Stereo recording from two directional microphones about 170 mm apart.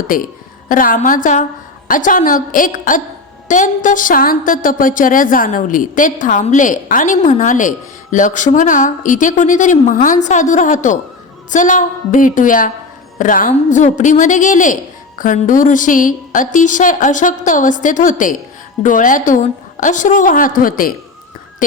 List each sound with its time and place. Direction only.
0.1 s a woman's voice: 55° left (ahead or behind)